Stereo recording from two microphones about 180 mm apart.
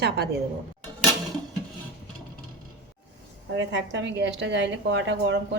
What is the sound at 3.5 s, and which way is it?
A woman's voice, 85° right.